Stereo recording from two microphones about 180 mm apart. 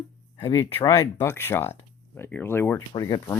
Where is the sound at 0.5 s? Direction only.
15° left (ahead or behind).